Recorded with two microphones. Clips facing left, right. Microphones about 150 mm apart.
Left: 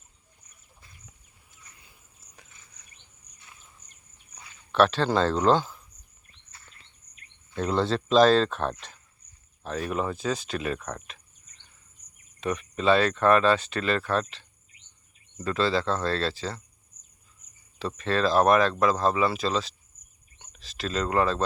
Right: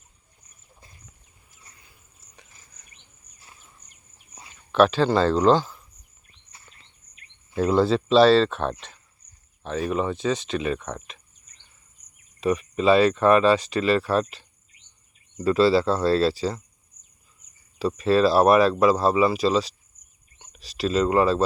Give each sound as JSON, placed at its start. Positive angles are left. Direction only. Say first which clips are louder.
{"t": 4.7, "sound": "speech", "louder": "right 3 dB", "side_deg": 0}
{"t": 7.5, "sound": "speech", "louder": "right 6 dB", "side_deg": -10}
{"t": 12.4, "sound": "speech", "louder": "right 6 dB", "side_deg": -5}
{"t": 15.4, "sound": "speech", "louder": "right 7 dB", "side_deg": -10}
{"t": 17.7, "sound": "speech", "louder": "right 7 dB", "side_deg": -5}